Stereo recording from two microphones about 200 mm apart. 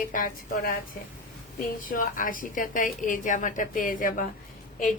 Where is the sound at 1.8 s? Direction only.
45° left (ahead or behind).